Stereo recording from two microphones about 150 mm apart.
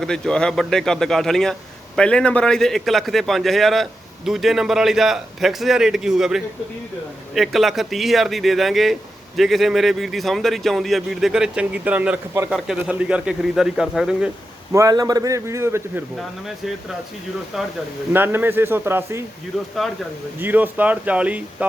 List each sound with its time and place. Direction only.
0.0 s speech: 5° left (ahead or behind)
14.7 s a man's voice: 20° right (ahead or behind)
17.5 s speech: centre (ahead or behind)
18.1 s speech: 15° right (ahead or behind)
20.4 s speech: 10° right (ahead or behind)